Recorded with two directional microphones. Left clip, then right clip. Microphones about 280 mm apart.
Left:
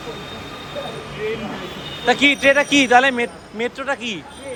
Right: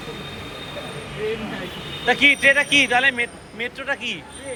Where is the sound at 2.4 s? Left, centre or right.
Centre.